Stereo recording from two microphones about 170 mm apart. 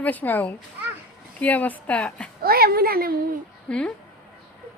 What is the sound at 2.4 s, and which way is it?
Speech, 65° right (ahead or behind).